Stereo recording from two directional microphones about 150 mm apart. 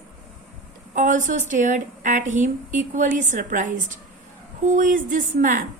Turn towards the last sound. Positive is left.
turn(degrees=-60)  # may be behind; listen again after turning